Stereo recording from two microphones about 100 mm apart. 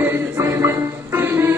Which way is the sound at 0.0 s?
25° right (ahead or behind).